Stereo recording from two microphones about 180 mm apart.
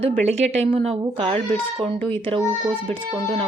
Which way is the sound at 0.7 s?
35° right (ahead or behind).